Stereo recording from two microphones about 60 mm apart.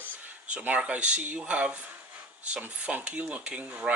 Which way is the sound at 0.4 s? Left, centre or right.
Right.